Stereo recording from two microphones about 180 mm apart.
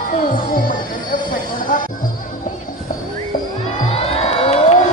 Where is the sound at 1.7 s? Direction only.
45° left (ahead or behind).